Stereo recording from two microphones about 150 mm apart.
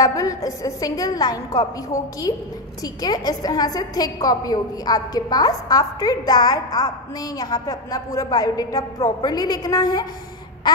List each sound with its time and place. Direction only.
0.0 s a woman's voice: 25° left (ahead or behind)